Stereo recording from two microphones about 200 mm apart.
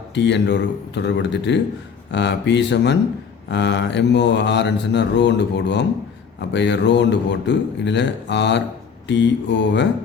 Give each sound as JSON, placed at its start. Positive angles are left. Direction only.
{"t": 0.1, "sound": "speech", "side_deg": 60}